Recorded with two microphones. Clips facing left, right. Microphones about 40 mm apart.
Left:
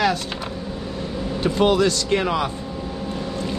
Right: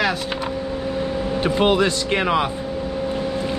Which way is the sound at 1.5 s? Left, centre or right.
Right.